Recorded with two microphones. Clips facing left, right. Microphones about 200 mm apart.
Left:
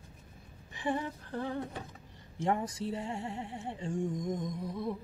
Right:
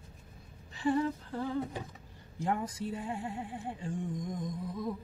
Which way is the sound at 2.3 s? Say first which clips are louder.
Left 2 dB; 25° left (ahead or behind).